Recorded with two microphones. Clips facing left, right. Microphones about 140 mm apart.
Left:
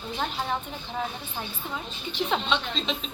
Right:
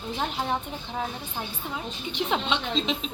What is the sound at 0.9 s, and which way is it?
Speech, 5° right (ahead or behind).